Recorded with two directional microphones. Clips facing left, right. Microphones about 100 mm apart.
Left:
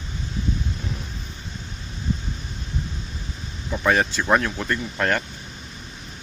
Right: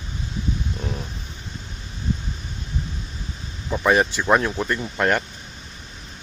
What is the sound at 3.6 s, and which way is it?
Speech, 15° right (ahead or behind).